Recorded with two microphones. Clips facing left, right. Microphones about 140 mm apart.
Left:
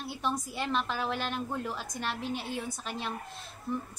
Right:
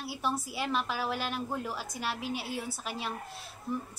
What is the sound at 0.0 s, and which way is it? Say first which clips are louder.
A woman's voice: even; 5° right (ahead or behind).